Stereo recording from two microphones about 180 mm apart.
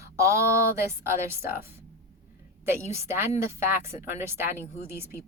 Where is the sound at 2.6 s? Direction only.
15° right (ahead or behind).